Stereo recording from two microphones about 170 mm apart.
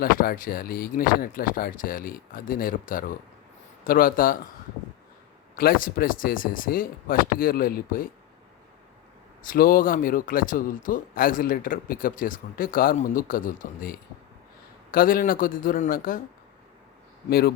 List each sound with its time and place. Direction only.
0.0 s a man's voice: 60° left (ahead or behind)
5.5 s a man's voice: 60° left (ahead or behind)
9.4 s a man's voice: 55° left (ahead or behind)
17.2 s a man's voice: 65° left (ahead or behind)